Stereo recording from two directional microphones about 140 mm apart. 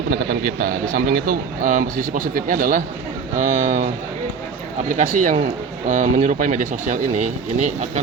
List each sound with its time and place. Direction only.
0.1 s speech: 90° right
3.3 s speech: 65° right (ahead or behind)
4.9 s speech: 65° right (ahead or behind)